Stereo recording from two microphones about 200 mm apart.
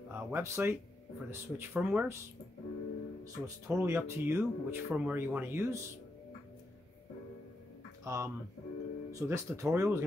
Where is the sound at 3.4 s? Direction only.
15° right (ahead or behind).